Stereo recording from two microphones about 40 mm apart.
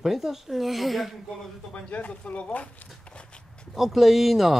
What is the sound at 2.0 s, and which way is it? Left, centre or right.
Speech, left.